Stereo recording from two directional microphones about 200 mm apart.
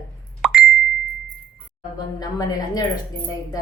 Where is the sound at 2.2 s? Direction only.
20° left (ahead or behind).